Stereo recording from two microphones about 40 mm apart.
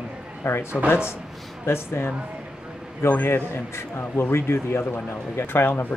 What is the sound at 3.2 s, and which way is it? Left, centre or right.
A man's voice, left.